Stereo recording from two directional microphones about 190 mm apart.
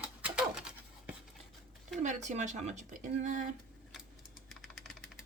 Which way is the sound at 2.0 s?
40° right (ahead or behind).